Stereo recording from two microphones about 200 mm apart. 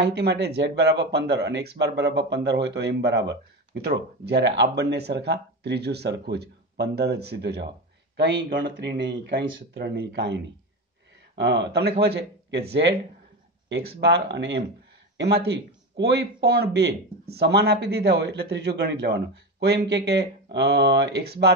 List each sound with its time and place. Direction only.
0.0 s speech: 55° right (ahead or behind)